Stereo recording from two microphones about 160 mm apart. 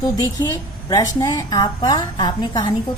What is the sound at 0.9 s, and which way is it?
A woman's voice, 25° left (ahead or behind).